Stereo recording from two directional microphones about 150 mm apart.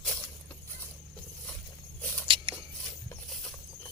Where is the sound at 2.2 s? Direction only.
35° right (ahead or behind).